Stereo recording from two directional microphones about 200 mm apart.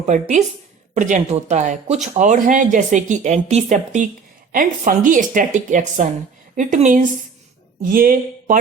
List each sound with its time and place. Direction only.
0.0 s speech: 35° right (ahead or behind)